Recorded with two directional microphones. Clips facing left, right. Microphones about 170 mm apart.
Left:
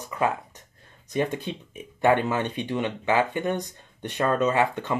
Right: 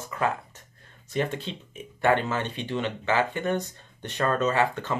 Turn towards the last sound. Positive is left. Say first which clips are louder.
# left 1 dB
turn(degrees=15)  # may be behind; listen again after turning